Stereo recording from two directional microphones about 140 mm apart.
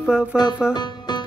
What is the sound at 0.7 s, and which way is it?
Music, 30° left (ahead or behind).